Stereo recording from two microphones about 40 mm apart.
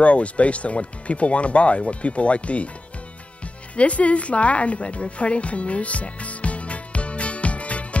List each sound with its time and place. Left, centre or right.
0.0 s speech: left
3.7 s music: left